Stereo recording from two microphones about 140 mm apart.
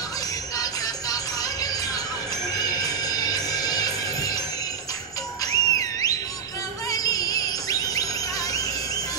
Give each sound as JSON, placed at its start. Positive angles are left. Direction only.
{"t": 0.6, "sound": "music", "side_deg": 25}
{"t": 2.8, "sound": "music", "side_deg": 25}
{"t": 5.4, "sound": "music", "side_deg": 25}
{"t": 6.9, "sound": "a sound", "side_deg": 25}